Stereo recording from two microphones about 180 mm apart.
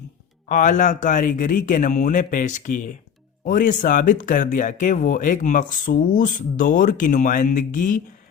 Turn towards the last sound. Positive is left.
turn(degrees=45)  # may be behind; listen again after turning